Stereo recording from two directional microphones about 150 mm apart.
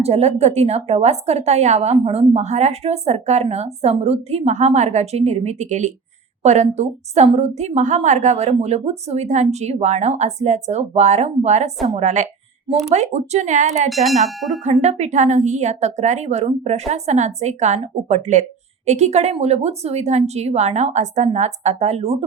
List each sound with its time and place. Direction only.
0.0 s speech: 45° right (ahead or behind)
13.9 s a sound: centre (ahead or behind)
14.6 s speech: 50° right (ahead or behind)